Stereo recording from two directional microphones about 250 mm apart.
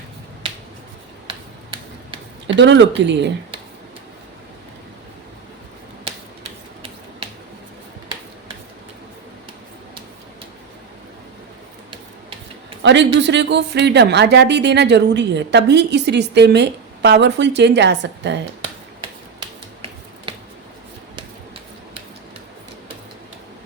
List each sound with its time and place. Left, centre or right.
1.3 s finger snapping: right
2.5 s speech: right
12.8 s a sound: right
13.1 s speech: right